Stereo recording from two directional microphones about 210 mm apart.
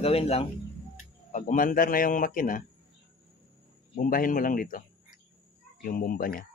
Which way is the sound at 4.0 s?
40° left (ahead or behind).